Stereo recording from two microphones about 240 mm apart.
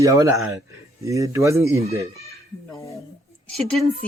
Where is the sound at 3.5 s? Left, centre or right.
Centre.